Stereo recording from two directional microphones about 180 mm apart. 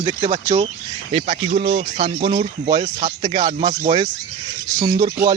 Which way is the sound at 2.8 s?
40° right (ahead or behind).